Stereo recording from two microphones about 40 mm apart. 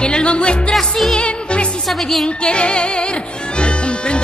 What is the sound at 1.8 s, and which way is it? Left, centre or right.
Speech, centre.